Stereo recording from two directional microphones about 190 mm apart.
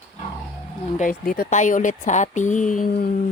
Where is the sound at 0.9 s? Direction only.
45° left (ahead or behind).